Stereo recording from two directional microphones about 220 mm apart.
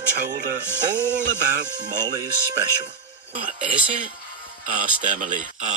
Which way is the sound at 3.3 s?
35° right (ahead or behind).